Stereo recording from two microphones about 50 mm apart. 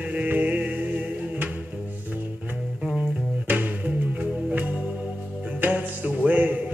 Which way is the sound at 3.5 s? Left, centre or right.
Right.